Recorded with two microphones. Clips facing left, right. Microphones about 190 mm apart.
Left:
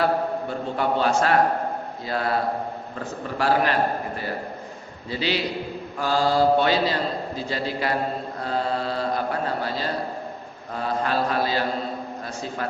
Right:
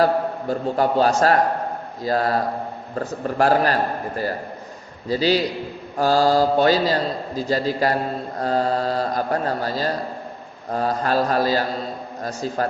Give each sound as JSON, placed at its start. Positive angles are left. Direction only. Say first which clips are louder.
{"t": 0.0, "sound": "a man's voice", "louder": "right 3 dB", "side_deg": -40}
{"t": 5.0, "sound": "a man's voice", "louder": "right 6 dB", "side_deg": -40}